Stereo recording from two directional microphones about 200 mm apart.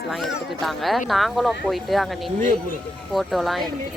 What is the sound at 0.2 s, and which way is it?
Speech, centre (ahead or behind).